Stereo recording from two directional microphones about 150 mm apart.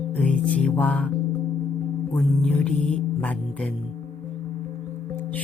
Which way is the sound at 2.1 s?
5° left (ahead or behind).